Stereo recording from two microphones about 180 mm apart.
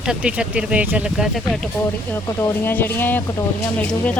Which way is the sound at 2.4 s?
10° left (ahead or behind).